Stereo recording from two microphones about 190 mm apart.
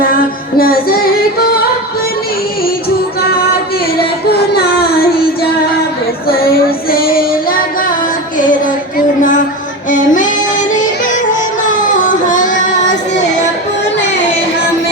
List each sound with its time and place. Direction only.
0.6 s child singing: 50° left (ahead or behind)
3.2 s music: 55° left (ahead or behind)
4.3 s child singing: 55° left (ahead or behind)
9.0 s a sound: 45° left (ahead or behind)
9.9 s music: 45° left (ahead or behind)
11.6 s child singing: 45° left (ahead or behind)